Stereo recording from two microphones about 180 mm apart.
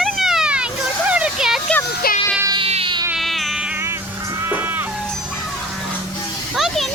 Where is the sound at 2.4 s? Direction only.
25° right (ahead or behind).